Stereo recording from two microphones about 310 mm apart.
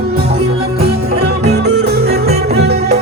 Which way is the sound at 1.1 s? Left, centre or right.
Right.